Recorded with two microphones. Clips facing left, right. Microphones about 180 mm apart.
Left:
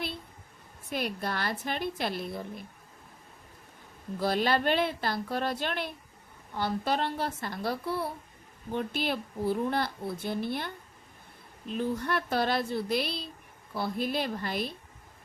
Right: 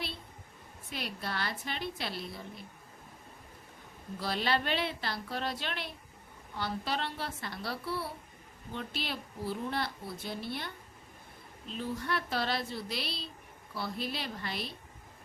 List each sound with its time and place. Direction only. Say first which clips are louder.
0.9 s a woman's voice: left 6 dB; 50° left (ahead or behind)
4.2 s a woman's voice: left 5 dB; 50° left (ahead or behind)
11.7 s a woman's voice: left 5 dB; 50° left (ahead or behind)